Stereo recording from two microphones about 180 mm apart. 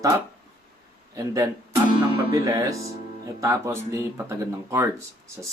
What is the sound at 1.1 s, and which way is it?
Speech, 20° right (ahead or behind).